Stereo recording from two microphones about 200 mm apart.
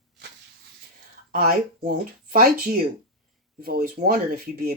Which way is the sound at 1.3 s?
50° right (ahead or behind).